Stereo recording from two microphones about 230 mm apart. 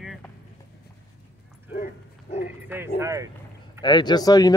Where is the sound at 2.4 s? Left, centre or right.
Centre.